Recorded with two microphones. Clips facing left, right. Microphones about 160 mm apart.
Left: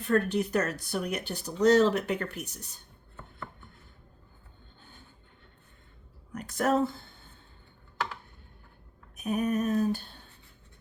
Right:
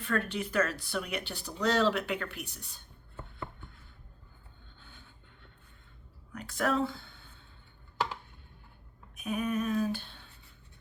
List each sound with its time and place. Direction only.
0.0 s speech: 40° left (ahead or behind)
6.3 s speech: 40° left (ahead or behind)
9.1 s a sound: 40° left (ahead or behind)